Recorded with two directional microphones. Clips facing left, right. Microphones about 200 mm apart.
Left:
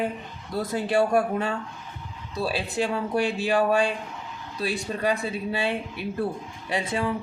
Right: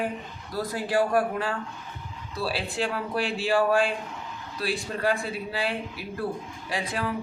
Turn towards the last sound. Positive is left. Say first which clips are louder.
# left 3 dB
turn(degrees=25)  # may be behind; listen again after turning